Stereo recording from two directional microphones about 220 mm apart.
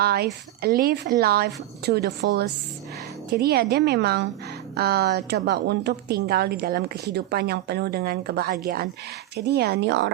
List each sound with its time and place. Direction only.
0.0 s a woman's voice: 45° right (ahead or behind)